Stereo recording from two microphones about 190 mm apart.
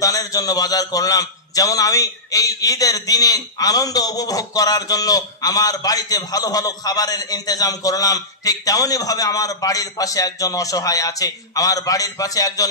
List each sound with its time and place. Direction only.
0.0 s a man's voice: 20° left (ahead or behind)